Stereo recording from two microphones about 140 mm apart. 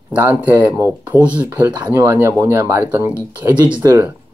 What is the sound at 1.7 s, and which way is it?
Speech, 25° right (ahead or behind).